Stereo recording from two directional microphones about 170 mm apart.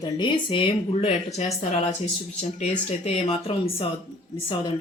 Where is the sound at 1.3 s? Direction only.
45° left (ahead or behind).